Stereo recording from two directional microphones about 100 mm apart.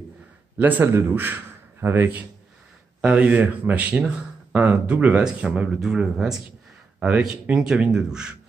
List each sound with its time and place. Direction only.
0.6 s a man's voice: 15° right (ahead or behind)
7.0 s speech: 15° right (ahead or behind)